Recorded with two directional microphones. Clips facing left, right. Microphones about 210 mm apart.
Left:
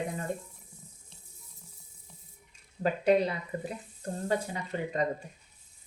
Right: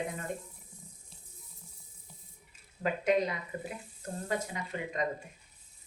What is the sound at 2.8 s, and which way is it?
Speech, 35° left (ahead or behind).